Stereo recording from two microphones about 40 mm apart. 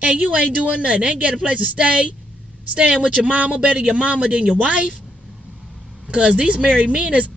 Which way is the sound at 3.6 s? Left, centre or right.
Right.